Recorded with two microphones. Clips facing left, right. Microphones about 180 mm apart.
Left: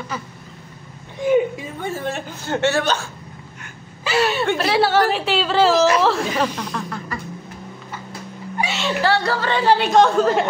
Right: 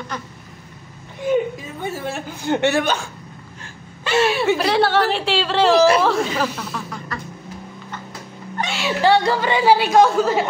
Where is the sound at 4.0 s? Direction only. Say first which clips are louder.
Right 1 dB; 5° left (ahead or behind).